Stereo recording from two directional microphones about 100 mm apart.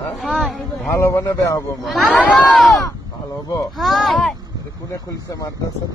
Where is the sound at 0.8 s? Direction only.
30° left (ahead or behind).